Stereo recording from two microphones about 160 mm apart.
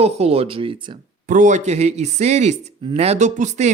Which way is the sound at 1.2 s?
50° right (ahead or behind).